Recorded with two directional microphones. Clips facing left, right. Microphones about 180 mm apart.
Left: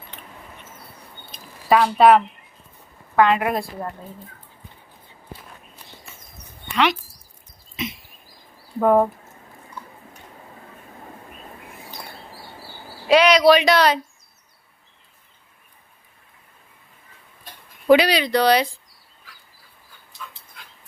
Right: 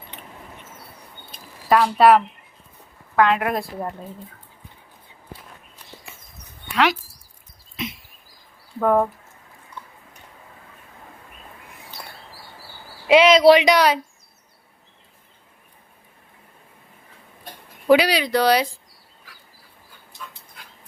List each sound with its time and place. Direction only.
1.3 s a sound: centre (ahead or behind)
3.2 s a woman's voice: centre (ahead or behind)
6.7 s speech: centre (ahead or behind)
7.8 s a sound: centre (ahead or behind)
8.8 s speech: 10° left (ahead or behind)
13.1 s speech: 20° right (ahead or behind)
17.8 s speech: 5° right (ahead or behind)